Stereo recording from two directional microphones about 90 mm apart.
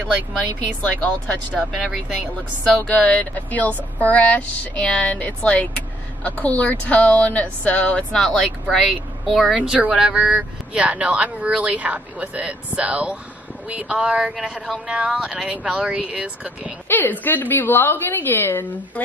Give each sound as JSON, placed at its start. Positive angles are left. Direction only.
{"t": 1.0, "sound": "speech", "side_deg": 15}
{"t": 2.8, "sound": "speech", "side_deg": 15}
{"t": 9.6, "sound": "speech", "side_deg": -15}
{"t": 16.8, "sound": "a woman's voice", "side_deg": 25}